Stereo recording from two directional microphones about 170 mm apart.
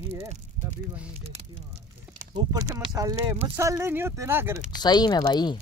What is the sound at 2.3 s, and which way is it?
Speech, 25° right (ahead or behind).